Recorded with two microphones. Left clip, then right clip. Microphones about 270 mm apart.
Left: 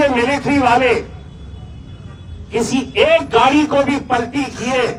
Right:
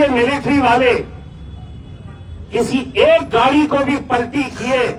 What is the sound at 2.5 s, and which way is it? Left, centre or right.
A man's voice, left.